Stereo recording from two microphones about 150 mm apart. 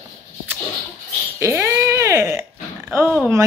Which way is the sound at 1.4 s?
20° right (ahead or behind).